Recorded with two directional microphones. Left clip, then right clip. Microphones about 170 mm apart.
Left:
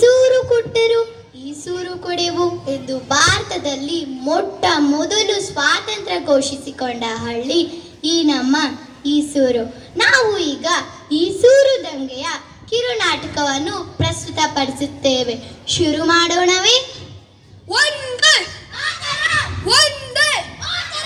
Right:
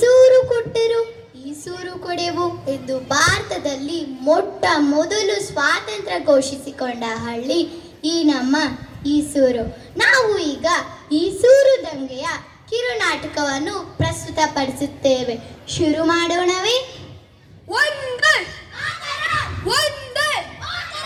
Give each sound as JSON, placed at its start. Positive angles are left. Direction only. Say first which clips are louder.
{"t": 0.0, "sound": "child singing", "louder": "right 1 dB", "side_deg": -5}
{"t": 1.5, "sound": "speech", "louder": "left 5 dB", "side_deg": -5}
{"t": 17.7, "sound": "a sound", "louder": "left 2 dB", "side_deg": 10}